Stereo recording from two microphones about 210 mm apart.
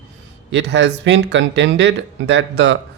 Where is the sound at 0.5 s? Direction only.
55° right (ahead or behind).